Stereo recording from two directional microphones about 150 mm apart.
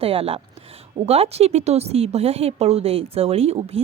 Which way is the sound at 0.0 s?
40° right (ahead or behind).